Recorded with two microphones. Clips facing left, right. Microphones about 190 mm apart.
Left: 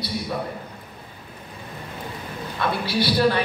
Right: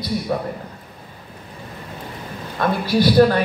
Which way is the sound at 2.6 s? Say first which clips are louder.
Right 5 dB; 45° right (ahead or behind).